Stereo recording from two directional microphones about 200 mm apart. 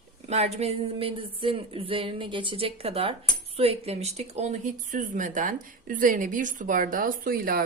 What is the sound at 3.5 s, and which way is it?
Speech, 30° right (ahead or behind).